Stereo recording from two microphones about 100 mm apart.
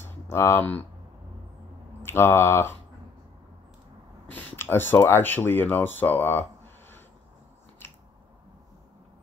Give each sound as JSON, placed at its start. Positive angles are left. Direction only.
{"t": 0.0, "sound": "typing", "side_deg": 30}
{"t": 2.0, "sound": "mantra", "side_deg": 25}
{"t": 4.3, "sound": "speech", "side_deg": 20}